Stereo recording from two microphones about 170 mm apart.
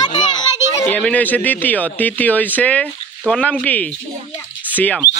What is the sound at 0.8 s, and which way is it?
Speech, 10° left (ahead or behind).